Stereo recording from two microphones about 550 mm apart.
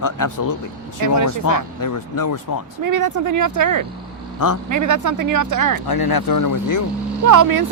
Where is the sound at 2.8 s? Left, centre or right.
Right.